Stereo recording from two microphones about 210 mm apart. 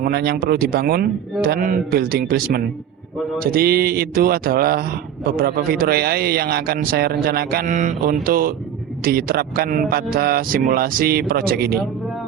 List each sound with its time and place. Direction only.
0.0 s a man's voice: 50° right (ahead or behind)